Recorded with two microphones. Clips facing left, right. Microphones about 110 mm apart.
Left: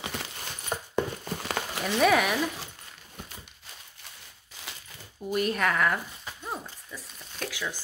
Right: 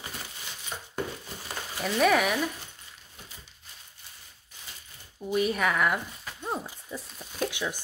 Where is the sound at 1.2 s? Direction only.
65° left (ahead or behind).